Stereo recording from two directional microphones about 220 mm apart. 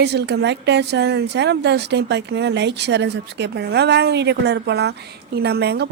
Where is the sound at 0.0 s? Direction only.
50° right (ahead or behind).